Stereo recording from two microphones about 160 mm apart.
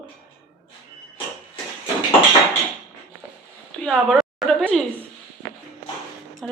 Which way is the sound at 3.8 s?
Centre (ahead or behind).